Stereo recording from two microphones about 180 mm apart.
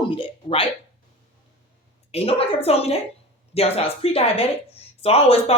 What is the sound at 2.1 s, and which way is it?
Speech, 35° left (ahead or behind).